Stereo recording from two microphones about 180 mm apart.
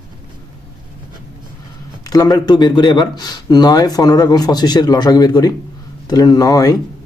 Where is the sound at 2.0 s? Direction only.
20° left (ahead or behind).